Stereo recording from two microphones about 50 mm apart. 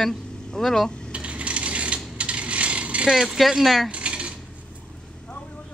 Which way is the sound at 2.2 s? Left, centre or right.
Right.